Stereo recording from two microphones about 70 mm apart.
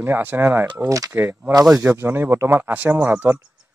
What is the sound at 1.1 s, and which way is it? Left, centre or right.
Speech, right.